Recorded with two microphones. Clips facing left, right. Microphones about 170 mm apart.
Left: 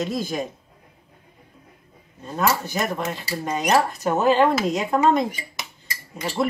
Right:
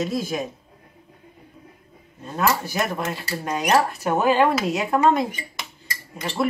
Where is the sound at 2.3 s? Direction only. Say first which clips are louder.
Even; 5° right (ahead or behind).